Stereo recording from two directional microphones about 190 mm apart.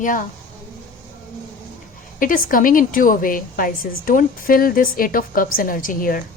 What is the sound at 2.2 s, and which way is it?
A woman's voice, 45° left (ahead or behind).